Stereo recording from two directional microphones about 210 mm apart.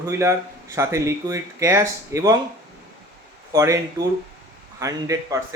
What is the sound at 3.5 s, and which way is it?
Speech, 15° right (ahead or behind).